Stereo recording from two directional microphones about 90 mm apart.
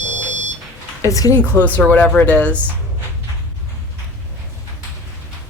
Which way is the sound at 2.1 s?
15° left (ahead or behind).